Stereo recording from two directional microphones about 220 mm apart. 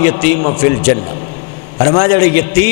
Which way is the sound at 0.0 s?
15° left (ahead or behind).